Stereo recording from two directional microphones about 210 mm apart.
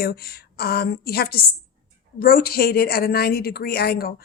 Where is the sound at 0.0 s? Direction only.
45° left (ahead or behind).